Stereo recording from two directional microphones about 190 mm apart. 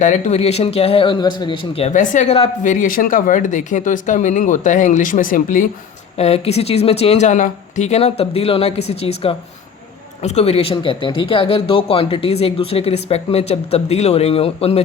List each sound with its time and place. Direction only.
0.0 s a man's voice: 35° left (ahead or behind)
6.1 s a man's voice: 35° left (ahead or behind)